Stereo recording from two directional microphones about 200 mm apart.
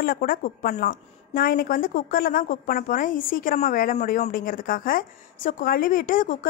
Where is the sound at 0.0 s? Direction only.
45° left (ahead or behind).